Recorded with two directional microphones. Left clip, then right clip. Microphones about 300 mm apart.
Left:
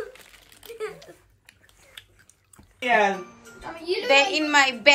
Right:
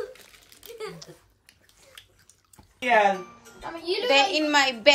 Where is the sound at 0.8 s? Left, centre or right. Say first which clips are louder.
Left 4 dB; centre.